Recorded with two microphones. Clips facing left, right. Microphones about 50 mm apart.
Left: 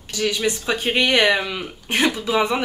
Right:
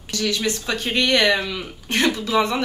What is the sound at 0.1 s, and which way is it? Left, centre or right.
A woman's voice, centre.